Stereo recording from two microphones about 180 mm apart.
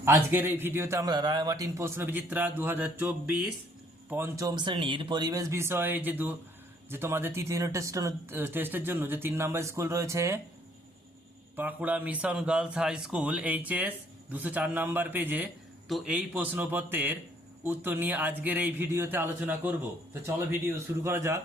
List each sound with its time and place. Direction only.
0.0 s a man's voice: 10° right (ahead or behind)
11.5 s a man's voice: 10° right (ahead or behind)